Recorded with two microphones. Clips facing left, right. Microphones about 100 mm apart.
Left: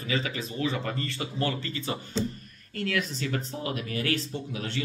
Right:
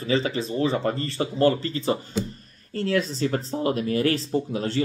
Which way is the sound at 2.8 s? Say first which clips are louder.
Right 6 dB; 30° right (ahead or behind).